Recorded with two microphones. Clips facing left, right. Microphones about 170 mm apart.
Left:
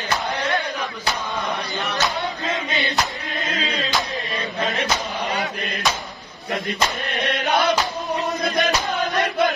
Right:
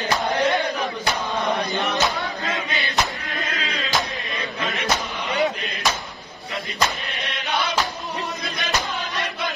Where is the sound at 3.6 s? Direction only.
30° left (ahead or behind).